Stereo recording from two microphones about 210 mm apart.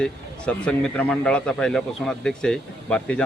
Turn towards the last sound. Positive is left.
turn(degrees=5)  # may be behind; listen again after turning